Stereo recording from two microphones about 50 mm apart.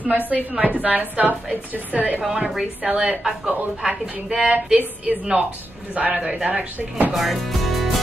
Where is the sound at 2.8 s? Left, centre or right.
Right.